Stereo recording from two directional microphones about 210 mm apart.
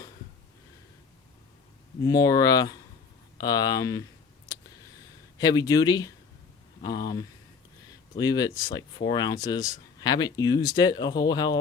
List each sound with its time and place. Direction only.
2.0 s speech: 15° left (ahead or behind)
5.4 s speech: 20° left (ahead or behind)